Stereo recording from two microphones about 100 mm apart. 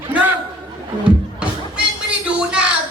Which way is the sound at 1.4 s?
10° right (ahead or behind).